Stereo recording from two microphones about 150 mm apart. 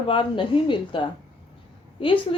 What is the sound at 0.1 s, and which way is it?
A woman's voice, 35° left (ahead or behind).